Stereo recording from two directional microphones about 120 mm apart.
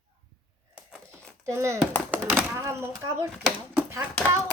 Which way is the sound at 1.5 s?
25° right (ahead or behind).